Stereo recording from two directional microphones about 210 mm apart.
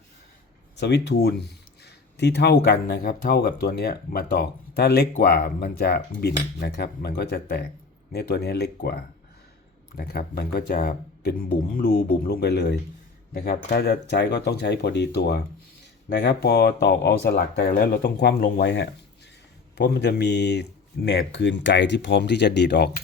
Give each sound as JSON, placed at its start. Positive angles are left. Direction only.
{"t": 0.8, "sound": "speech", "side_deg": 55}